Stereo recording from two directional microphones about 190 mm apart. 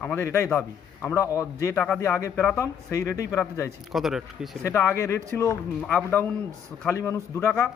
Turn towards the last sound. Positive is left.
turn(degrees=15)  # may be behind; listen again after turning